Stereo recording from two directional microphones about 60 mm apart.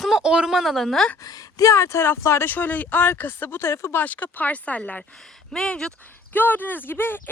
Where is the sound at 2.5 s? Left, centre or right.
Left.